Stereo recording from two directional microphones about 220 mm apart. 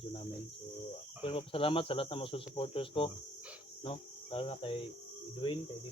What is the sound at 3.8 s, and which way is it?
Cricket, 25° left (ahead or behind).